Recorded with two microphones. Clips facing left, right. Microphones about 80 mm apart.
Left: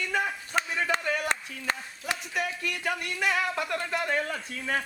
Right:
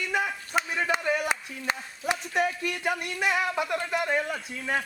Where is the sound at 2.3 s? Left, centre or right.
Right; by 4.8 s centre.